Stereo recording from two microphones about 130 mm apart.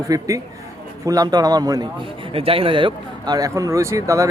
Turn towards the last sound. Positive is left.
turn(degrees=-25)  # may be behind; listen again after turning